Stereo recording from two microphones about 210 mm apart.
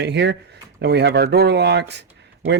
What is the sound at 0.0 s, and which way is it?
Speech, 55° right (ahead or behind).